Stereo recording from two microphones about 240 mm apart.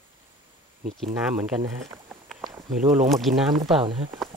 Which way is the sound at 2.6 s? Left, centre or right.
Right.